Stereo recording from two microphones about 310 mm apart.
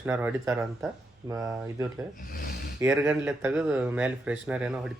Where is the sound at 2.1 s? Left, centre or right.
Left.